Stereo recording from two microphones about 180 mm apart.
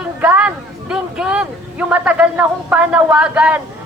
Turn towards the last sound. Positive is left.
turn(degrees=-10)  # may be behind; listen again after turning